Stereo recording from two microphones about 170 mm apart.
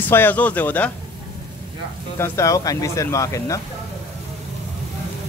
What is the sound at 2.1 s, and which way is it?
Speech, 15° left (ahead or behind).